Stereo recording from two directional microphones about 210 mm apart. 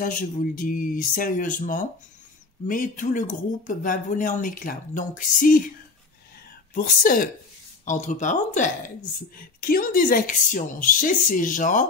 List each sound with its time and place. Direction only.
0.0 s speech: 40° left (ahead or behind)
6.7 s speech: 40° left (ahead or behind)